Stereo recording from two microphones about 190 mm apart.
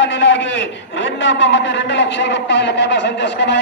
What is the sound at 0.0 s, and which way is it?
A man's voice, 70° left (ahead or behind).